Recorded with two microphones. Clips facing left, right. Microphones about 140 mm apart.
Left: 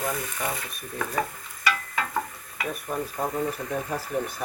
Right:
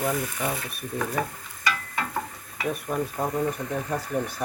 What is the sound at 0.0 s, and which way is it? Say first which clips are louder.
Speech: right 3 dB; 15° right (ahead or behind).